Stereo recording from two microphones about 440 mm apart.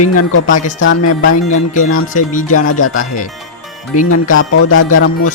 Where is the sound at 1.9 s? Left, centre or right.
Centre.